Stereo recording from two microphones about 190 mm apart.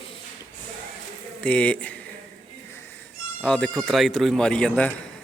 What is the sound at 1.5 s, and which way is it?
Speech, 5° left (ahead or behind).